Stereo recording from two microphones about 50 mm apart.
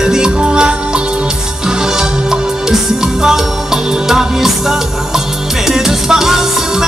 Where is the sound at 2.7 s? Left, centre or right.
Centre.